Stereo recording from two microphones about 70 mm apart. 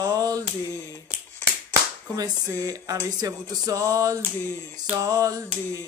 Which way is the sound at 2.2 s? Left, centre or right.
Right.